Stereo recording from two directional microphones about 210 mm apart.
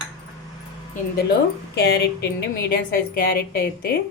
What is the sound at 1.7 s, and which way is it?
A woman's voice, 55° left (ahead or behind).